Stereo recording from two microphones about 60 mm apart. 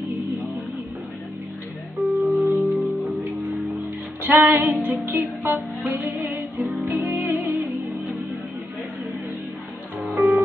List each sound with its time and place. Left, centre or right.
2.0 s music: centre
4.2 s music: right
10.0 s music: centre